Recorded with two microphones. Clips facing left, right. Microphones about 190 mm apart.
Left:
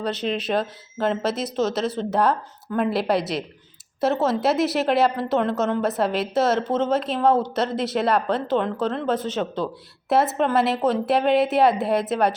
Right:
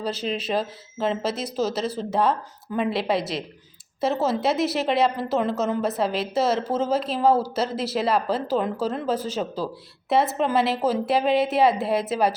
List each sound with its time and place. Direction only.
0.0 s a woman's voice: 5° right (ahead or behind)
1.4 s speech: 30° right (ahead or behind)
2.0 s a woman's voice: centre (ahead or behind)
10.3 s a woman's voice: centre (ahead or behind)